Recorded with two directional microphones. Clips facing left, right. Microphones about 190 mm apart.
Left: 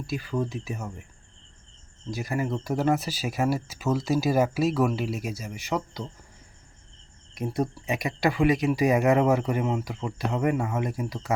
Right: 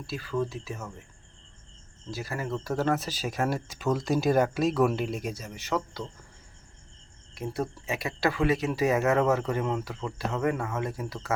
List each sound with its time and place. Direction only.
0.1 s speech: 15° left (ahead or behind)
2.0 s speech: 15° left (ahead or behind)
7.3 s speech: 15° left (ahead or behind)